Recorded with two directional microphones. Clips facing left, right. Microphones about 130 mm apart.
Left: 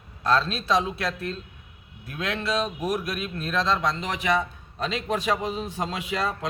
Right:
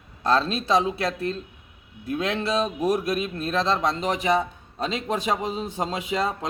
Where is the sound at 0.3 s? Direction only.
30° right (ahead or behind).